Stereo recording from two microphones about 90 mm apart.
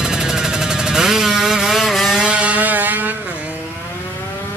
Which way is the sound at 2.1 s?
15° right (ahead or behind).